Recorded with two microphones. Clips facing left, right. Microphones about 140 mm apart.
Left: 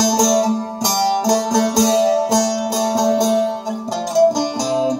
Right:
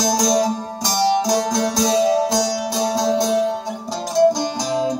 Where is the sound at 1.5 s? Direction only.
20° left (ahead or behind).